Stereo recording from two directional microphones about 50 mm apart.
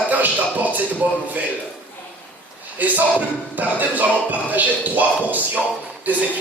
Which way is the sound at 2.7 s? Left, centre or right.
Right.